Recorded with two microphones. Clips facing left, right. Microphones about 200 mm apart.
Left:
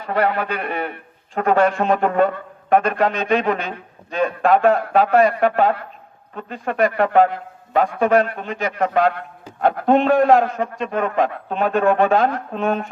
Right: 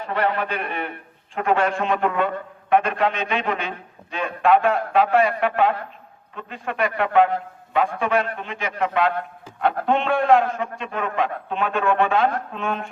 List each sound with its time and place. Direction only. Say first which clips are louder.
0.0 s a man's voice: left 3 dB; 40° left (ahead or behind)